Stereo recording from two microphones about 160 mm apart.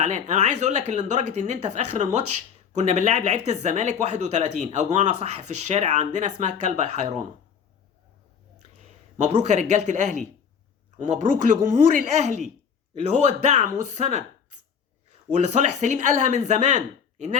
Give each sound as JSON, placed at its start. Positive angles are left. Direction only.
{"t": 0.0, "sound": "speech", "side_deg": -45}
{"t": 8.8, "sound": "speech", "side_deg": -45}
{"t": 15.4, "sound": "speech", "side_deg": -45}